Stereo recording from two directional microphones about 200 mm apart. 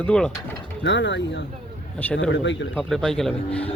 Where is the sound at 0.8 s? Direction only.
65° left (ahead or behind).